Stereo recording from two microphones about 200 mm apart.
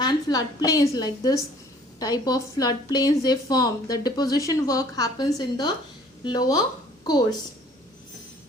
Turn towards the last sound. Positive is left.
turn(degrees=20)  # may be behind; listen again after turning